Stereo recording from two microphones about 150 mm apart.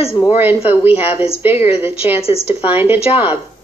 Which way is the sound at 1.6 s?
40° left (ahead or behind).